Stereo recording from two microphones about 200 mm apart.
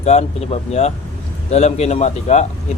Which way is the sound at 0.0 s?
35° left (ahead or behind).